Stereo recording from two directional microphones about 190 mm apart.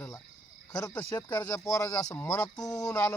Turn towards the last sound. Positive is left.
turn(degrees=15)  # may be behind; listen again after turning